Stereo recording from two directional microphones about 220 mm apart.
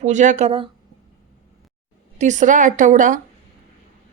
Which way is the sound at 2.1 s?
35° right (ahead or behind).